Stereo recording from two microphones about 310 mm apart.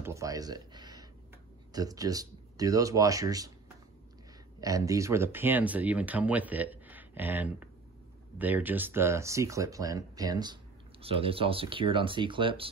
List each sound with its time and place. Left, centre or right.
0.0 s speech: centre
4.6 s speech: centre